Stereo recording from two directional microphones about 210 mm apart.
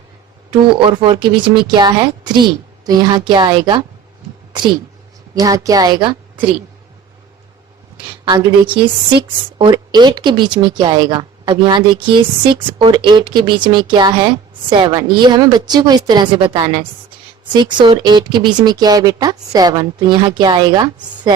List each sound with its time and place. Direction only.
0.7 s speech: 20° right (ahead or behind)
5.3 s a woman's voice: 15° right (ahead or behind)
8.2 s speech: 25° right (ahead or behind)